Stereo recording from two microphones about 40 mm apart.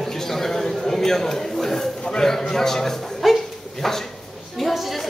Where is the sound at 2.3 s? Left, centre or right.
Centre.